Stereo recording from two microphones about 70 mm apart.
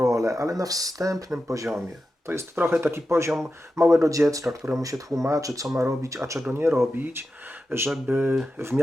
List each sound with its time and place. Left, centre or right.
0.0 s speech: right
2.2 s speech: right